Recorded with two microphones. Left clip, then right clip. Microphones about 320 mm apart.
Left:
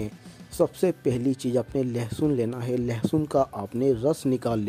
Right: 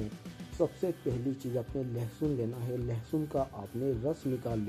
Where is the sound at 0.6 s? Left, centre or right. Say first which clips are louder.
Left 8 dB; left.